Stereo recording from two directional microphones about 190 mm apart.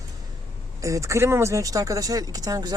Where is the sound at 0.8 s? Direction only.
15° right (ahead or behind).